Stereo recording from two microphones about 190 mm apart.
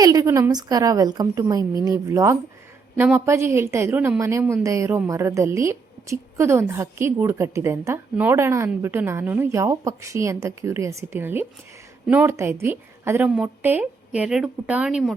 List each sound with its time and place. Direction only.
0.0 s a woman's voice: 20° right (ahead or behind)